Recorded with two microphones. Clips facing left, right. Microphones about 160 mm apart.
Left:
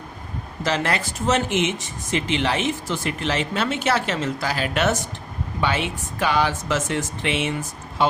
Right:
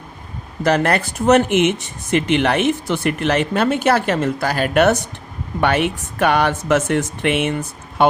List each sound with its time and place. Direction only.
0.6 s speech: 55° right (ahead or behind)